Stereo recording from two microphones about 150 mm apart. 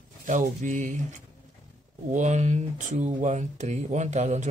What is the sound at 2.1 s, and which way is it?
Speech, 50° right (ahead or behind).